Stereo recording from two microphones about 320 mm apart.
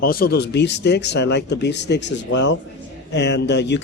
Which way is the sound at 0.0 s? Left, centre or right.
Left.